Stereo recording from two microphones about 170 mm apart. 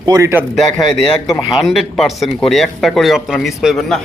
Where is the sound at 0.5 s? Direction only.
Centre (ahead or behind).